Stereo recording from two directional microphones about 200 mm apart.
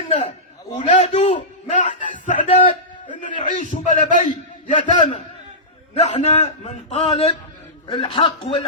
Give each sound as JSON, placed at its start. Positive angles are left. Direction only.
{"t": 0.8, "sound": "a man's voice", "side_deg": 35}